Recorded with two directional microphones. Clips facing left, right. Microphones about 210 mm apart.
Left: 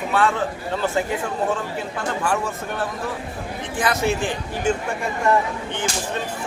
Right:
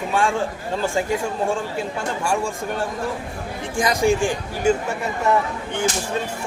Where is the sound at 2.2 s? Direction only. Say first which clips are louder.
Right 3 dB; 10° right (ahead or behind).